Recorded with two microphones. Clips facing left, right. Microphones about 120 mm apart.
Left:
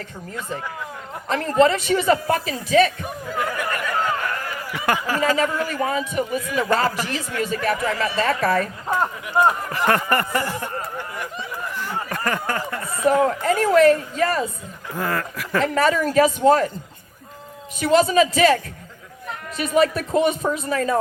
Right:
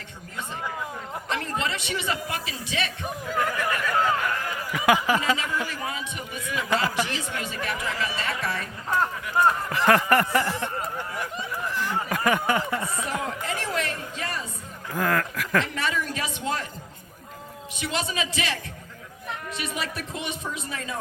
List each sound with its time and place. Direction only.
1.3 s a man's voice: 40° left (ahead or behind)
3.8 s a sound: centre (ahead or behind)
4.9 s a sound: 20° right (ahead or behind)
5.2 s speech: 45° left (ahead or behind)
7.0 s speech: centre (ahead or behind)
7.3 s speech: 45° left (ahead or behind)
9.0 s speech: 15° left (ahead or behind)
9.6 s speech: 5° left (ahead or behind)
11.8 s speech: centre (ahead or behind)
13.1 s speech: 45° left (ahead or behind)
14.9 s speech: 5° left (ahead or behind)
15.6 s speech: 45° left (ahead or behind)
17.7 s speech: 45° left (ahead or behind)